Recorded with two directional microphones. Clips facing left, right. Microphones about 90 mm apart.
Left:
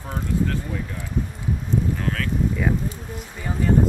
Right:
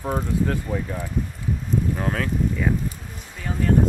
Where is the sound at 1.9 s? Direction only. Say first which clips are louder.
Right 1 dB; 20° right (ahead or behind).